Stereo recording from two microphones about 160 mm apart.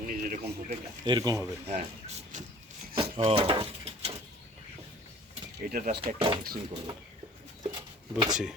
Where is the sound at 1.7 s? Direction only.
45° right (ahead or behind).